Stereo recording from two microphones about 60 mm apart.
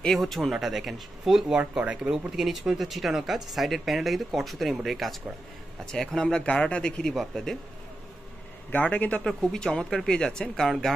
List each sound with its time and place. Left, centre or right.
0.0 s speech: centre
1.5 s speech: right
2.0 s speech: centre
8.7 s a man's voice: left
9.4 s speech: centre